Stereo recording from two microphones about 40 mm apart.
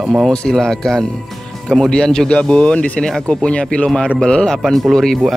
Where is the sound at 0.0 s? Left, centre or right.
Centre; by 3.0 s left.